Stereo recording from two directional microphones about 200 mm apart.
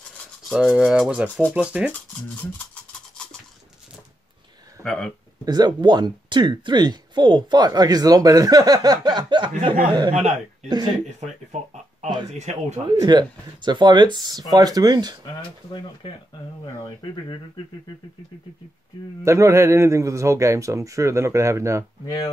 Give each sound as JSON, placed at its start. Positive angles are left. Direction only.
{"t": 0.2, "sound": "rub", "side_deg": 0}
{"t": 1.5, "sound": "speech", "side_deg": -5}
{"t": 4.8, "sound": "speech", "side_deg": 5}
{"t": 5.4, "sound": "speech", "side_deg": -20}
{"t": 9.5, "sound": "speech", "side_deg": -35}
{"t": 12.8, "sound": "speech", "side_deg": -20}
{"t": 19.2, "sound": "a man's voice", "side_deg": -15}
{"t": 22.0, "sound": "speech", "side_deg": 20}